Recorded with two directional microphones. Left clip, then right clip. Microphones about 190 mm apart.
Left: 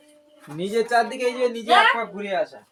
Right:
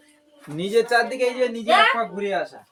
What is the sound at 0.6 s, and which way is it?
Speech, 35° right (ahead or behind).